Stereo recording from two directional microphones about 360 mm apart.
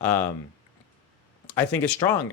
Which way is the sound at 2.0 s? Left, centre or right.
Centre.